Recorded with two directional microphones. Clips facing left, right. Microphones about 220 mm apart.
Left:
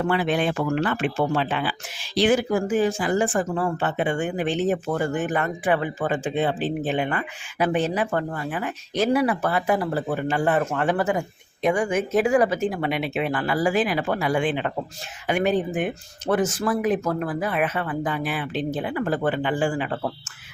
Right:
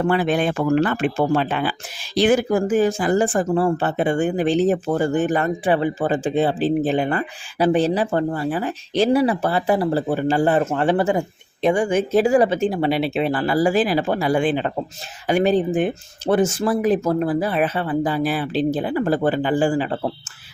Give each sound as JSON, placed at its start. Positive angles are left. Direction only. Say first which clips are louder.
{"t": 0.0, "sound": "speech", "louder": "right 3 dB", "side_deg": -40}